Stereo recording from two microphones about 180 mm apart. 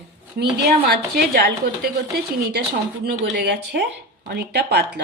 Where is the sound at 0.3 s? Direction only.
65° right (ahead or behind).